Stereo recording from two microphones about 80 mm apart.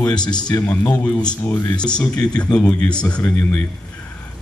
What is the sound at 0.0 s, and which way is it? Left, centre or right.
Speech, left.